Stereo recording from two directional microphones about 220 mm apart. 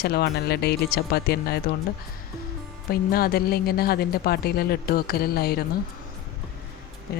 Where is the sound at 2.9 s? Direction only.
45° left (ahead or behind).